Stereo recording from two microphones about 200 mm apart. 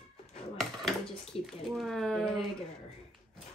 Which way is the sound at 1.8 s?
Centre (ahead or behind).